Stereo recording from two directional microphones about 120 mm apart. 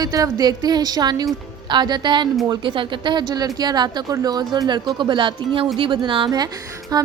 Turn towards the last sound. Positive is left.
turn(degrees=-30)  # may be behind; listen again after turning